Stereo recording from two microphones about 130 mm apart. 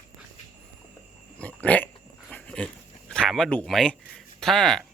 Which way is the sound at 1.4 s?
10° left (ahead or behind).